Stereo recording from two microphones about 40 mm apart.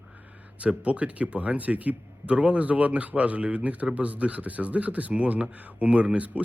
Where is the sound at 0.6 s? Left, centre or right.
Right.